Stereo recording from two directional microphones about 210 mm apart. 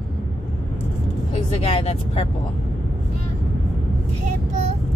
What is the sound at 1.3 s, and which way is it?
Speech, 30° left (ahead or behind).